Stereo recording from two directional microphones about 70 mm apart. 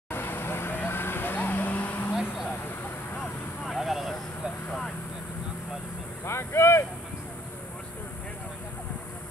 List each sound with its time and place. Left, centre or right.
0.1 s vehicle: left
3.2 s vehicle: centre
4.6 s vehicle: centre
6.2 s a sound: left